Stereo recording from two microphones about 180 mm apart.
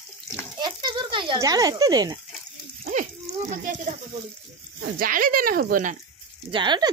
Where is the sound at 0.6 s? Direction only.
25° right (ahead or behind).